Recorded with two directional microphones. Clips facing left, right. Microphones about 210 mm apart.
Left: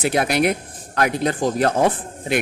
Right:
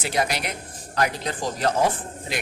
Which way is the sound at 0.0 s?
55° left (ahead or behind).